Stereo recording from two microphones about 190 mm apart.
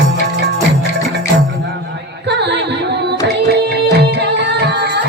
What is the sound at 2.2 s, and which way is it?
Carnatic music, 65° right (ahead or behind).